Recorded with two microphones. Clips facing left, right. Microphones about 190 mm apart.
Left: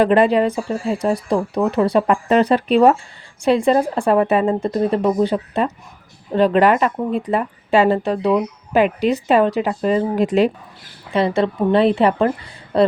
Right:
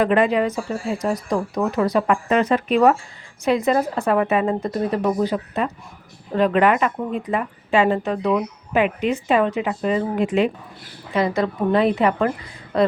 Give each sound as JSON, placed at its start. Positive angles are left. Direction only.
{"t": 0.0, "sound": "a woman's voice", "side_deg": 30}